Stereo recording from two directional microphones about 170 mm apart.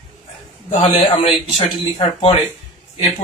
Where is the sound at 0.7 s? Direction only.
35° left (ahead or behind).